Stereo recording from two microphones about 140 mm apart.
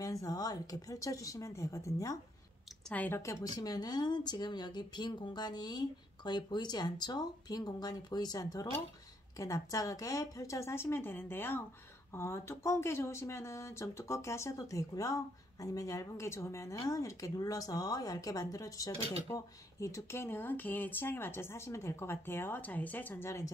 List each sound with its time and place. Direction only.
0.0 s speech: 25° left (ahead or behind)